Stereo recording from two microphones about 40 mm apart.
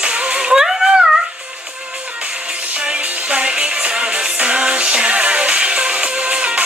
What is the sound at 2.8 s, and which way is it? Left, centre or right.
Music, right.